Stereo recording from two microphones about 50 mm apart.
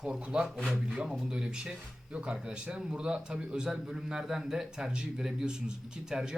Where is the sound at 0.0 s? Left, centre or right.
Centre.